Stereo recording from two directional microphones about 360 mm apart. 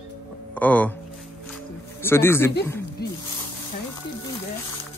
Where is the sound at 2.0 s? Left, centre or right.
Centre.